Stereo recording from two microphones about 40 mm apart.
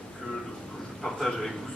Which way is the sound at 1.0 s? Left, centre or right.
Centre.